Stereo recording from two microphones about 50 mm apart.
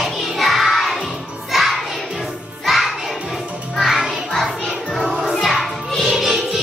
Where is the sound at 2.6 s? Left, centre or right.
Centre.